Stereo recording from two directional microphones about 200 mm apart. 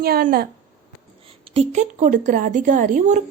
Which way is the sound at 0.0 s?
50° right (ahead or behind).